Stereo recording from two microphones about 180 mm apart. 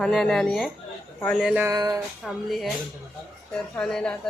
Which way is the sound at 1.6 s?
20° right (ahead or behind).